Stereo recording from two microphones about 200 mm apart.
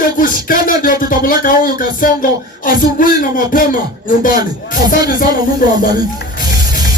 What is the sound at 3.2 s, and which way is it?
Speech, 45° left (ahead or behind).